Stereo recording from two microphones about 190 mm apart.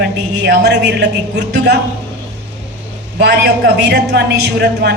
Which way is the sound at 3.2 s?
60° right (ahead or behind).